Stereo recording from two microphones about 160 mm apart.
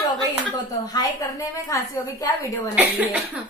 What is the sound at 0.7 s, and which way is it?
A woman's voice, 20° left (ahead or behind).